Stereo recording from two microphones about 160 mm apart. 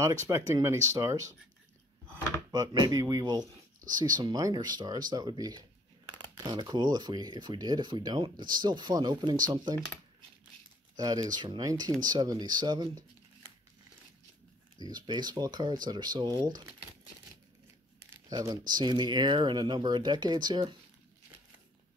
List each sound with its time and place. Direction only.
0.0 s speech: 20° right (ahead or behind)
2.5 s speech: 25° right (ahead or behind)
11.0 s speech: 25° right (ahead or behind)
14.9 s speech: 25° right (ahead or behind)
18.3 s speech: 20° right (ahead or behind)